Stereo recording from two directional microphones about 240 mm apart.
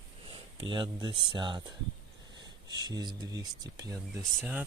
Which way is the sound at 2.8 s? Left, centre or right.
Centre.